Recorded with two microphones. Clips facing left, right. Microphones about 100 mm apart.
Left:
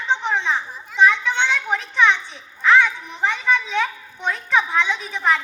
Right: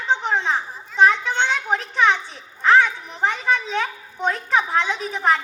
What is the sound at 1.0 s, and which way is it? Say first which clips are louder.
Children playing: even; 40° right (ahead or behind).